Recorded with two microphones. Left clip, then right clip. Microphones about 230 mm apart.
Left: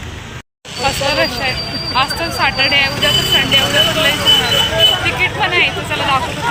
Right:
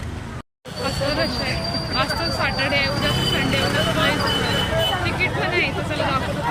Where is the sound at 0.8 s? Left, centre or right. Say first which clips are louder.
Left 8 dB; centre.